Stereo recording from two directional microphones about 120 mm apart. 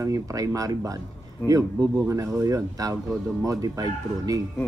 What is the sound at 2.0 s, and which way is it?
Speech, 25° right (ahead or behind).